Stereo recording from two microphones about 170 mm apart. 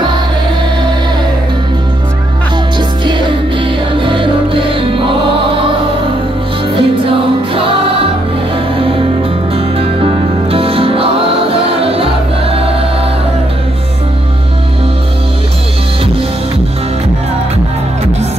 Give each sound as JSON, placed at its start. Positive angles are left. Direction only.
{"t": 3.6, "sound": "music", "side_deg": -30}
{"t": 6.8, "sound": "music", "side_deg": -30}
{"t": 10.5, "sound": "music", "side_deg": -35}